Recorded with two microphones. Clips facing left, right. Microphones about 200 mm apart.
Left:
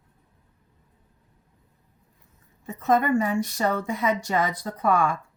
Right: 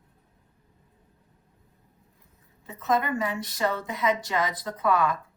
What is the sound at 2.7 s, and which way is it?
A woman's voice, 45° left (ahead or behind).